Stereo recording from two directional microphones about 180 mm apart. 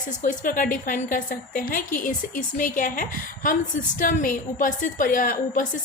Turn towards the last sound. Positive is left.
turn(degrees=50)  # may be behind; listen again after turning